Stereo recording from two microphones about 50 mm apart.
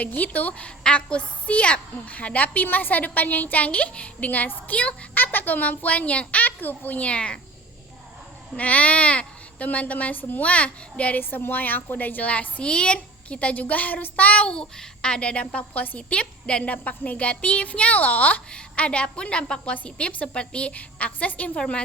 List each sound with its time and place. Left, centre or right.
0.0 s a woman's voice: left
8.5 s a woman's voice: left
10.4 s a woman's voice: left
11.2 s a woman's voice: left
16.0 s a woman's voice: left